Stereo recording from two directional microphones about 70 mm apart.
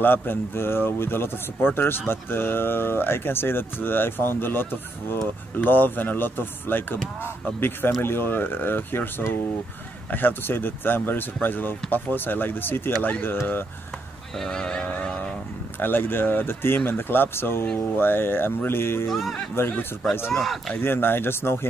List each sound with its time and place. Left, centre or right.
0.0 s speech: left
8.0 s speech: left
14.3 s speech: centre
15.8 s speech: left
19.0 s speech: centre
19.5 s speech: left
20.3 s a man's voice: centre
20.7 s speech: left